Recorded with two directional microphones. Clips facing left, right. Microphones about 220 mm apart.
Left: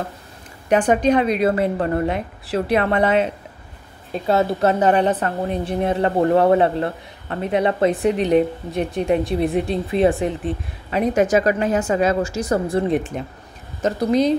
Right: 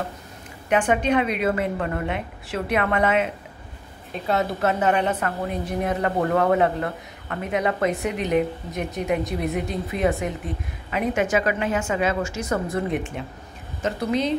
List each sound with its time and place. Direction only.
0.7 s a woman's voice: 40° left (ahead or behind)